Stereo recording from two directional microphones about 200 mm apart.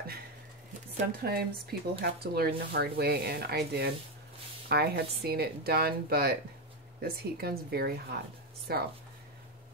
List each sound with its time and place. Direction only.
1.2 s speech: 50° right (ahead or behind)